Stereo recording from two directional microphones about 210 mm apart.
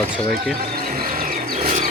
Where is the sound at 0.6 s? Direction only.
40° right (ahead or behind).